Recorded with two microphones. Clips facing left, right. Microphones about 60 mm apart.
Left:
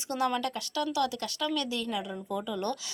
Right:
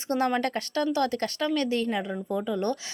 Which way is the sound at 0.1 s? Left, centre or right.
Right.